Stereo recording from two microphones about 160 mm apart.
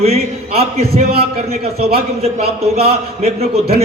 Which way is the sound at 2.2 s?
40° right (ahead or behind).